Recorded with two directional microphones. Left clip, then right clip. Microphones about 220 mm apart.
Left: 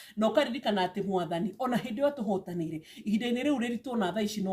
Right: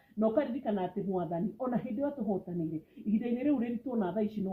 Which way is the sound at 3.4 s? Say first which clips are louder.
Left 2 dB; 20° left (ahead or behind).